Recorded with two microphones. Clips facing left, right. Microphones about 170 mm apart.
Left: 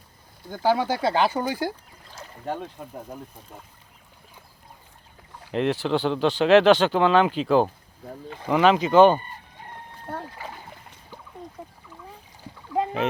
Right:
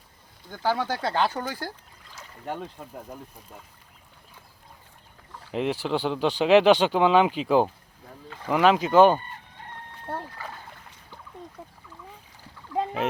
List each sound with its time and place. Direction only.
0.5 s speech: 15° left (ahead or behind)
5.5 s speech: 5° right (ahead or behind)
8.4 s speech: centre (ahead or behind)
10.3 s speech: 20° left (ahead or behind)